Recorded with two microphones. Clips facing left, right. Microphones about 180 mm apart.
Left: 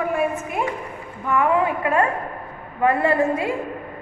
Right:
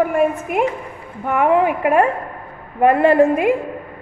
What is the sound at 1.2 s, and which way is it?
Speech, 60° right (ahead or behind).